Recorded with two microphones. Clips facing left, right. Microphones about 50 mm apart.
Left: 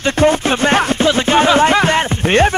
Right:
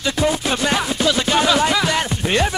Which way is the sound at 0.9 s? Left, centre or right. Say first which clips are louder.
Left 5 dB; left.